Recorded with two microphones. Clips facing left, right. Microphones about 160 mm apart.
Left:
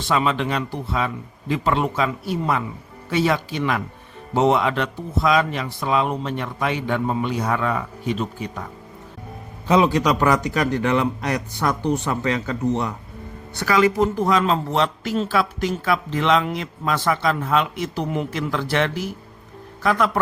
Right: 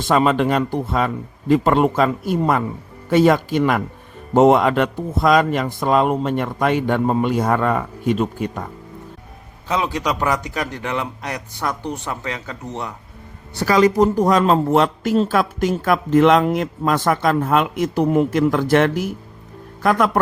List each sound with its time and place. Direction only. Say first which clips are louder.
0.1 s speech: right 5 dB; 45° right (ahead or behind)
9.6 s a man's voice: left 5 dB; 5° left (ahead or behind)
9.9 s a man's voice: left 3 dB; 15° right (ahead or behind)
13.5 s a man's voice: right 3 dB; 35° right (ahead or behind); by 20.1 s 50° right (ahead or behind)